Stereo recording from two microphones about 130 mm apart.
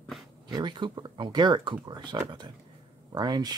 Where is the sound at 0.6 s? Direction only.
35° right (ahead or behind).